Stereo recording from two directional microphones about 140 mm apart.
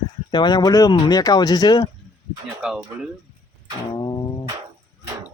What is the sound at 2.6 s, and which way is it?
Speech, 5° right (ahead or behind).